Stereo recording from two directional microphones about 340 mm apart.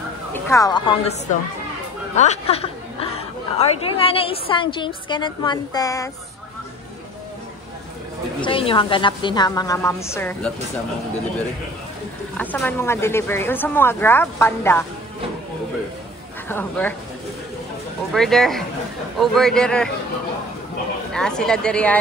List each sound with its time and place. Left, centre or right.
0.3 s a woman's voice: centre
8.4 s a woman's voice: centre
12.4 s a woman's voice: centre
16.4 s speech: centre
18.1 s speech: centre
21.1 s speech: centre